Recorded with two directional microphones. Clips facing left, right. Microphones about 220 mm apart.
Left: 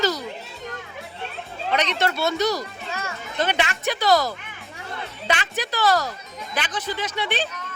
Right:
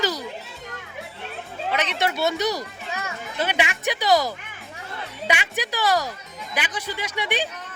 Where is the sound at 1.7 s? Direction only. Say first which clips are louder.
Left 2 dB; 10° right (ahead or behind).